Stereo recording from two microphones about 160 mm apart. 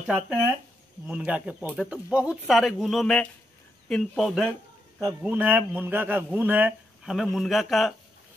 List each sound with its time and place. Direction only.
0.0 s a man's voice: 5° right (ahead or behind)